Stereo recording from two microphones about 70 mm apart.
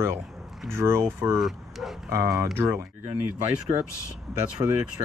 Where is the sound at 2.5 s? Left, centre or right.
Right.